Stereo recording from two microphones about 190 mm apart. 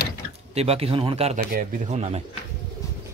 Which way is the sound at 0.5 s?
30° right (ahead or behind).